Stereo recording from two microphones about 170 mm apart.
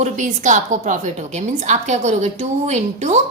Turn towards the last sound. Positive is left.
turn(degrees=-40)  # may be behind; listen again after turning